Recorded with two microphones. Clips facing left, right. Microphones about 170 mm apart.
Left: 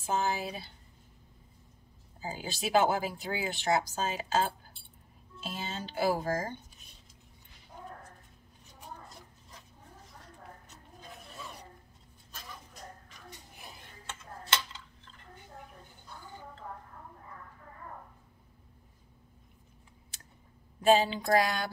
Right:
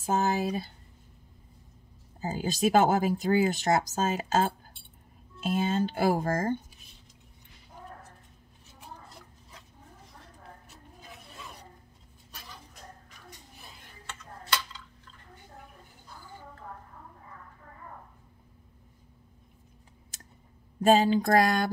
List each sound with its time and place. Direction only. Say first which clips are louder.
0.0 s a sound: right 5 dB; 45° right (ahead or behind)
2.2 s speech: right 9 dB; 45° right (ahead or behind)
20.8 s speech: right 3 dB; 45° right (ahead or behind)